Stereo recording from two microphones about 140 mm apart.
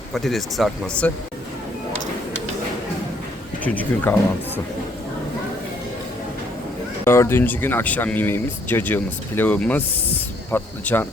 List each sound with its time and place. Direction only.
0.1 s speech: centre (ahead or behind)
3.6 s speech: 10° left (ahead or behind)
7.0 s speech: 15° left (ahead or behind)